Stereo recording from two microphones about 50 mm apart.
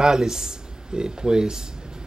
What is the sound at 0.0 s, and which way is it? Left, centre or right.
Speech, centre.